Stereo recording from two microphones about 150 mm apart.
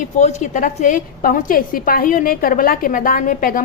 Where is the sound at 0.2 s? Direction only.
50° left (ahead or behind).